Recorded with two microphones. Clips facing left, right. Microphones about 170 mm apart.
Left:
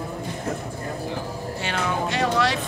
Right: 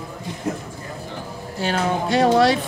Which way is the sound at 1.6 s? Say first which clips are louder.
Right 5 dB; 40° right (ahead or behind).